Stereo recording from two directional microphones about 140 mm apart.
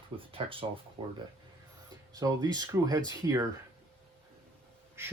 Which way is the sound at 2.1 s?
25° right (ahead or behind).